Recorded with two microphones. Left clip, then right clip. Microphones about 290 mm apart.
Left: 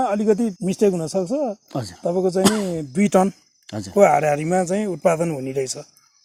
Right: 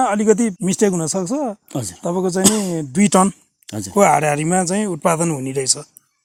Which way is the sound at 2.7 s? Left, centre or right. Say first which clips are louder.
Right 2 dB; right.